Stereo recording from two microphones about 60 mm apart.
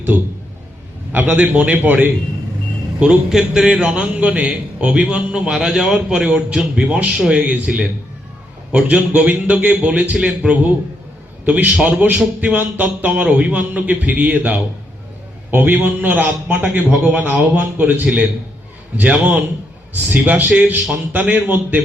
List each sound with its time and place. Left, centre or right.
0.1 s a man's voice: right
3.2 s a man's voice: centre; by 21.8 s right